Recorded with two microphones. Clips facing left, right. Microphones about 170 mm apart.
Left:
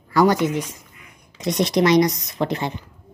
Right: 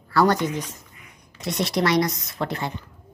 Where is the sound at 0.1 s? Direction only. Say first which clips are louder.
Left 3 dB; 10° left (ahead or behind).